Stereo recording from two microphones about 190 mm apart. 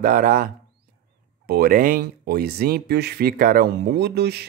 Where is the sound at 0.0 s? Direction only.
45° right (ahead or behind).